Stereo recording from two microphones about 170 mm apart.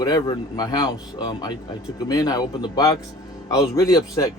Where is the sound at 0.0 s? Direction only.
25° left (ahead or behind).